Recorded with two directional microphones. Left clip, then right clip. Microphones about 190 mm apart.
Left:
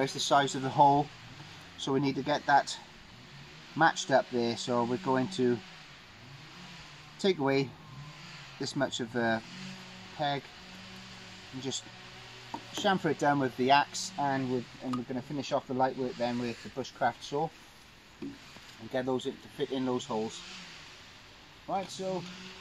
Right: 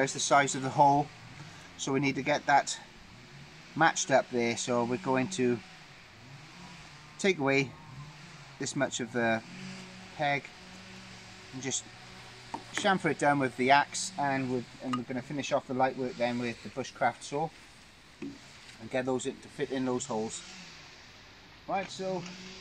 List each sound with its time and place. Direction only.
0.0 s speech: 5° right (ahead or behind)
7.2 s speech: 5° right (ahead or behind)
12.4 s speech: centre (ahead or behind)
18.9 s speech: 5° right (ahead or behind)
21.7 s speech: centre (ahead or behind)